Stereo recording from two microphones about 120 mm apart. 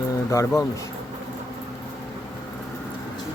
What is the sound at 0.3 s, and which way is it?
Speech, 25° left (ahead or behind).